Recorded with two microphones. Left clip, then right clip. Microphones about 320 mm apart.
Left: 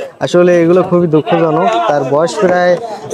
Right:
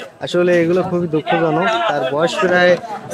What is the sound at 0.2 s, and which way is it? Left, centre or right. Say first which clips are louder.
A man's voice: left 6 dB; centre.